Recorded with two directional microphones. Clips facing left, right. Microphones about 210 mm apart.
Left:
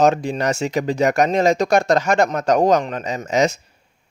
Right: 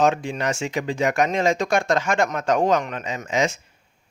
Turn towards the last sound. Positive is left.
turn(degrees=40)  # may be behind; listen again after turning